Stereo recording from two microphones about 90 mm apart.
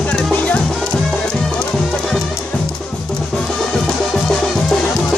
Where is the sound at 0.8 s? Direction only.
5° left (ahead or behind).